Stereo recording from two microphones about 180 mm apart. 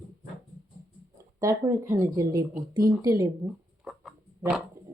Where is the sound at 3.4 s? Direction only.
Centre (ahead or behind).